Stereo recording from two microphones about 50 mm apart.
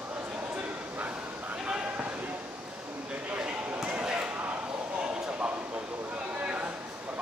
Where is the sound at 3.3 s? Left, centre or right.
Right.